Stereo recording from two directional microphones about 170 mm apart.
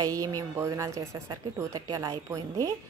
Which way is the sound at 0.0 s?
20° right (ahead or behind).